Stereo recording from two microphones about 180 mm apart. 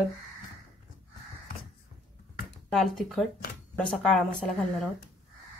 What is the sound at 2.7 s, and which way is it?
Speech, centre (ahead or behind).